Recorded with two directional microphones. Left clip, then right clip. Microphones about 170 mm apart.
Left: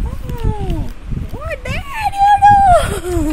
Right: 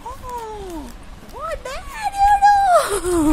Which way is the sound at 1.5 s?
Centre (ahead or behind).